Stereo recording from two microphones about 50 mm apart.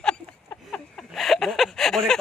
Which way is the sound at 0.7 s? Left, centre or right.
Centre.